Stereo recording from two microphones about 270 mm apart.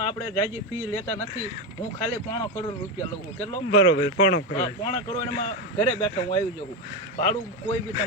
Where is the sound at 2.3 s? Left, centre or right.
Centre.